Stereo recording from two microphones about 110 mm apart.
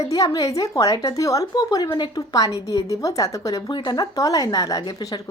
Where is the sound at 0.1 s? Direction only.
30° left (ahead or behind).